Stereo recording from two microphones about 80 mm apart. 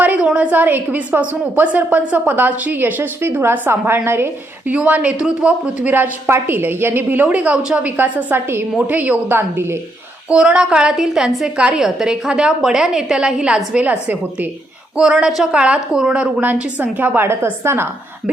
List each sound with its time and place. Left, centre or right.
0.0 s a woman's voice: centre; by 17.8 s right